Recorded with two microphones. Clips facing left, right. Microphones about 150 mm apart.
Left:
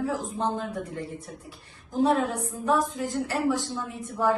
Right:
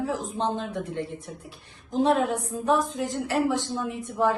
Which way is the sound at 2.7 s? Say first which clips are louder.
Right 1 dB; 20° right (ahead or behind).